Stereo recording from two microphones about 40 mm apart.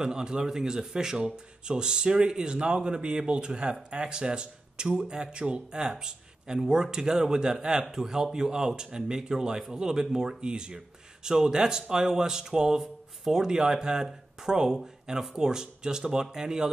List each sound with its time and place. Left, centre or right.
0.0 s speech: centre